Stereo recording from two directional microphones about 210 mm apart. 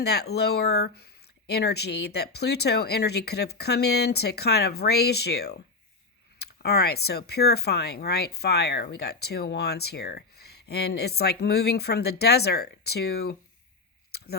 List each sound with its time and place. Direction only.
0.0 s speech: 50° left (ahead or behind)
6.6 s speech: 50° left (ahead or behind)